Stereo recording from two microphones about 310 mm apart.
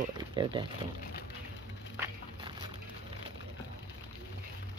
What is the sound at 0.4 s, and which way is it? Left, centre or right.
Speech, centre.